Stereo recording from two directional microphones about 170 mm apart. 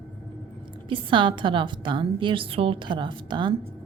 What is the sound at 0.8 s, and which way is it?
A woman's voice, 30° right (ahead or behind).